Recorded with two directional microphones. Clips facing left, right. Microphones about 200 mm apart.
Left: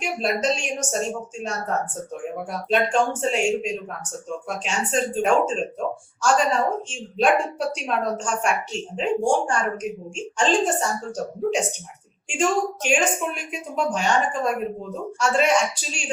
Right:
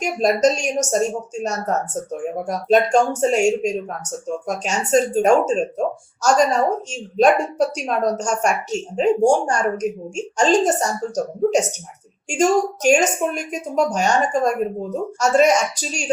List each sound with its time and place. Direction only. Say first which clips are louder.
0.0 s speech: right 7 dB; 40° right (ahead or behind)